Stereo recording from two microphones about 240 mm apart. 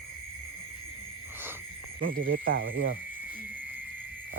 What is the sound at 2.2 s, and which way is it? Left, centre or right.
Speech, right.